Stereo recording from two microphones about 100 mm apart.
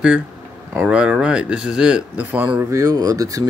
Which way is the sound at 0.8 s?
10° right (ahead or behind).